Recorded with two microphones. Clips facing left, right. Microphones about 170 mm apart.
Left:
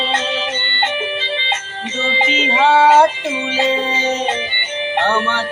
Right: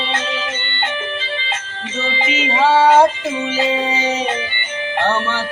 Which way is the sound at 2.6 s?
Centre (ahead or behind).